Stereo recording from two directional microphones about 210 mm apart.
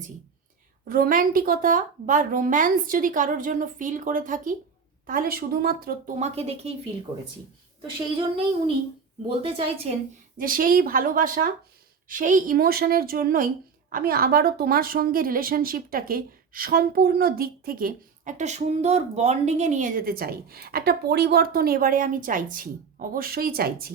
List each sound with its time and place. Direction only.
0.9 s a woman's voice: 45° right (ahead or behind)
9.4 s a woman's voice: 25° right (ahead or behind)
10.3 s speech: 40° right (ahead or behind)